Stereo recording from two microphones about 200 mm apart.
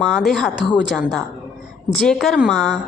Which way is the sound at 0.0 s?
Centre (ahead or behind).